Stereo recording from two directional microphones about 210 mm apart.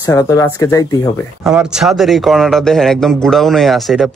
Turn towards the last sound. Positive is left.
turn(degrees=0)  # may be behind; listen again after turning